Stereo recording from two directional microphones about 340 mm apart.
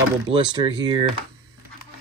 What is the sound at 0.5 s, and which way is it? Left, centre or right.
Speech, centre.